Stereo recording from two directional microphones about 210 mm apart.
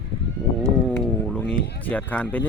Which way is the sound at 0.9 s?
10° left (ahead or behind).